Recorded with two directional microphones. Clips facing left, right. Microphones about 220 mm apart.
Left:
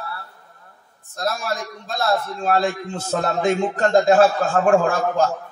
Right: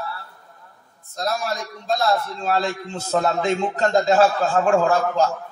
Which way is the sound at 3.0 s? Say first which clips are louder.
Even; 50° left (ahead or behind).